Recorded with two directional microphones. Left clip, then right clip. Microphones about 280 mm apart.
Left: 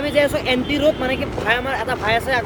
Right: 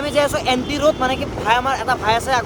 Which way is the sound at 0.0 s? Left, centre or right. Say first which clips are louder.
Even; centre.